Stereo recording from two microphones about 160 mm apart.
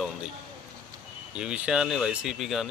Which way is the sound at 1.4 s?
5° right (ahead or behind).